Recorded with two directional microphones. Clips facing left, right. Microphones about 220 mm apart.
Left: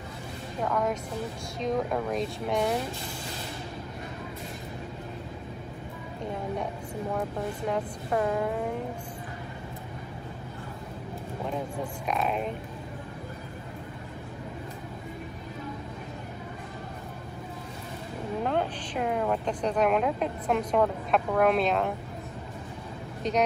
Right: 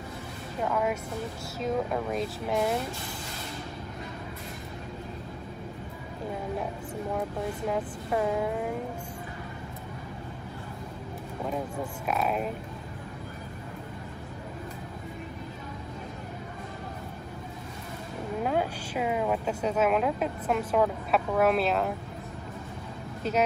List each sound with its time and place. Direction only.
0.6 s speech: 5° right (ahead or behind)
7.2 s speech: centre (ahead or behind)
11.4 s speech: 5° right (ahead or behind)
18.4 s speech: 5° right (ahead or behind)
23.2 s speech: 5° right (ahead or behind)